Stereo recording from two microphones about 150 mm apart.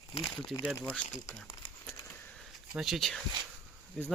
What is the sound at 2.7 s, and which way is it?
Speech, centre (ahead or behind).